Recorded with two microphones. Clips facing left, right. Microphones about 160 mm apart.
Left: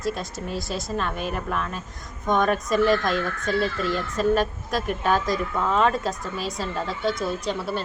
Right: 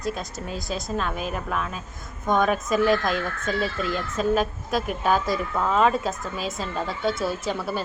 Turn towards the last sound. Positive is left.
turn(degrees=-5)  # may be behind; listen again after turning